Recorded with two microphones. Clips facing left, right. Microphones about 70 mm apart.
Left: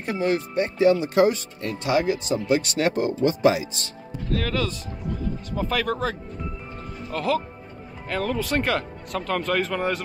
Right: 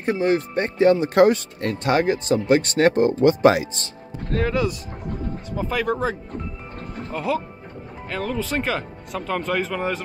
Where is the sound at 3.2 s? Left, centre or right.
Right.